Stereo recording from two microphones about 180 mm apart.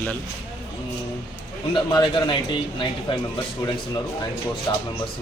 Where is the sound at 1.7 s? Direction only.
25° left (ahead or behind).